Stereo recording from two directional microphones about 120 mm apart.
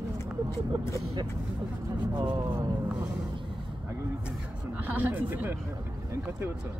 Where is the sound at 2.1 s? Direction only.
35° right (ahead or behind).